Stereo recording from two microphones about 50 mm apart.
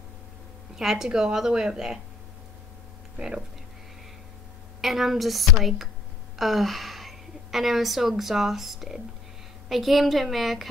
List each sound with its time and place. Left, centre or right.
0.7 s a woman's voice: centre
3.2 s a woman's voice: centre
4.8 s a woman's voice: centre